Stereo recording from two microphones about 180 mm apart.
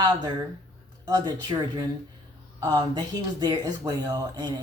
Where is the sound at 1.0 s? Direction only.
20° right (ahead or behind).